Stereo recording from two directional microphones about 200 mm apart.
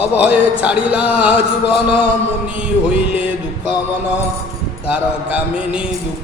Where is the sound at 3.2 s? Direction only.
5° right (ahead or behind).